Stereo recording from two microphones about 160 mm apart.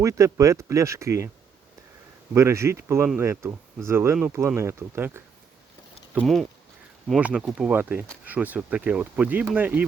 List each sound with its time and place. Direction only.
0.0 s speech: 20° right (ahead or behind)
2.3 s speech: 20° right (ahead or behind)
6.2 s speech: centre (ahead or behind)